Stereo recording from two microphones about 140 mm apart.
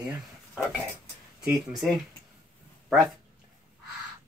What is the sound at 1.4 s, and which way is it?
Speech, 5° right (ahead or behind).